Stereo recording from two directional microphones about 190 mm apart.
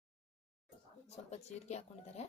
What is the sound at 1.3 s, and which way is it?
Speech, 35° left (ahead or behind).